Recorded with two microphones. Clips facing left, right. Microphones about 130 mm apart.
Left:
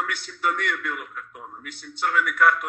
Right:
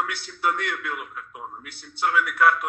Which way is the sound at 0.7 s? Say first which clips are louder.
Even; 10° right (ahead or behind).